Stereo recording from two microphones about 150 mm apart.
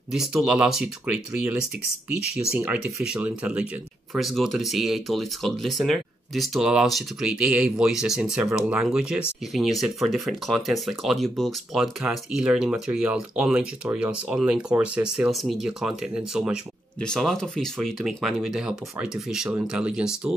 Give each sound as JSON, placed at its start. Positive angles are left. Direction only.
{"t": 0.1, "sound": "speech", "side_deg": -5}